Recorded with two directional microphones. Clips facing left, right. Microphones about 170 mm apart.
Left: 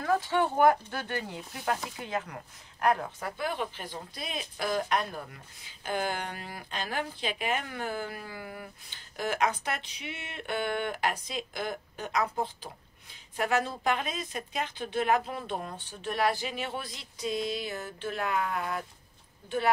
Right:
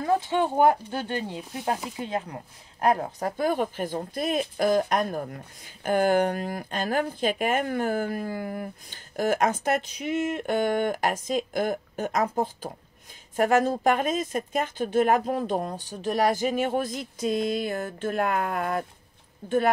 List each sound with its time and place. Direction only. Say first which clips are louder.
0.0 s speech: right 3 dB; 20° right (ahead or behind); by 18.9 s 50° right (ahead or behind)